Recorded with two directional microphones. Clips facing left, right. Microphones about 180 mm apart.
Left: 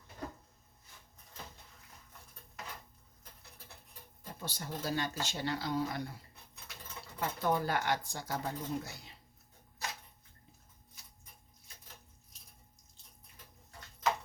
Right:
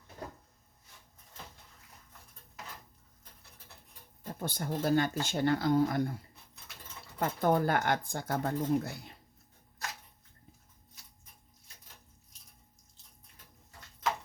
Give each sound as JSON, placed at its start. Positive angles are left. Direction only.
{"t": 4.4, "sound": "speech", "side_deg": -55}
{"t": 7.2, "sound": "speech", "side_deg": -50}